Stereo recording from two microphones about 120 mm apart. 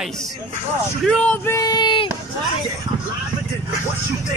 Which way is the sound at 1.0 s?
10° left (ahead or behind).